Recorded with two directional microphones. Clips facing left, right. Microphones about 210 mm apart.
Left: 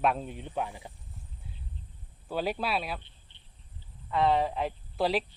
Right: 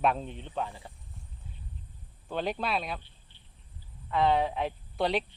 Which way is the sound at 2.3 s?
5° left (ahead or behind).